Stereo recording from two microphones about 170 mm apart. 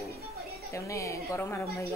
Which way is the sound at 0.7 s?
20° left (ahead or behind).